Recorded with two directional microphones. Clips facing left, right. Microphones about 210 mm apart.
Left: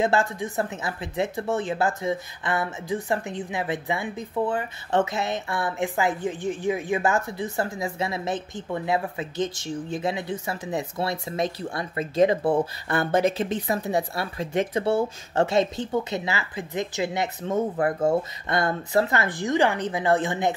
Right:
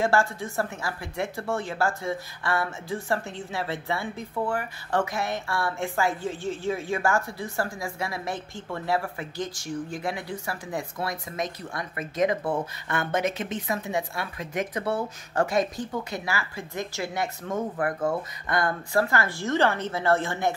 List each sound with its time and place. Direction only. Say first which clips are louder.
0.0 s speech: left 1 dB; 20° left (ahead or behind)